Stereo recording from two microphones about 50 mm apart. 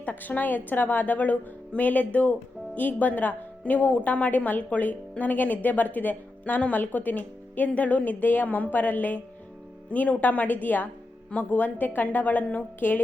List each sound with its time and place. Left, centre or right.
0.0 s speech: left